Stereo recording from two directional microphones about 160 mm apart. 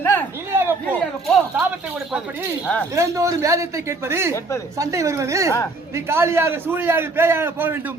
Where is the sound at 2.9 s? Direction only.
20° right (ahead or behind).